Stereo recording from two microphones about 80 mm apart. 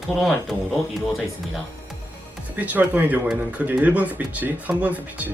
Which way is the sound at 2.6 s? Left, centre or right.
Right.